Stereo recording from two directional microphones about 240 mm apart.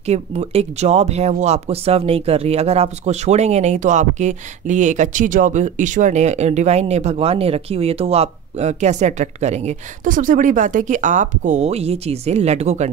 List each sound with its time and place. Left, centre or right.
0.0 s speech: right